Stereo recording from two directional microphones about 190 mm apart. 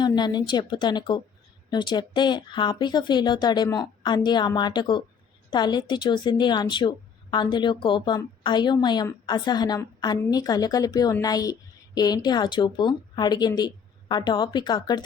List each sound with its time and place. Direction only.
0.0 s a woman's voice: 20° left (ahead or behind)